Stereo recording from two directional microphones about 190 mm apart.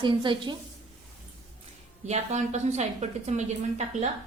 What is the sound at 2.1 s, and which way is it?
A woman's voice, 35° right (ahead or behind).